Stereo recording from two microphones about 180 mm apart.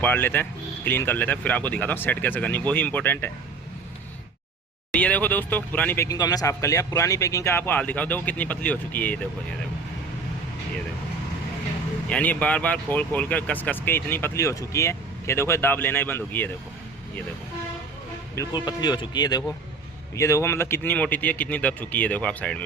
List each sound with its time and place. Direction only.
0.0 s speech: 10° left (ahead or behind)
4.9 s speech: 5° left (ahead or behind)
12.0 s speech: 10° left (ahead or behind)
18.3 s speech: 25° left (ahead or behind); by 22.6 s 5° left (ahead or behind)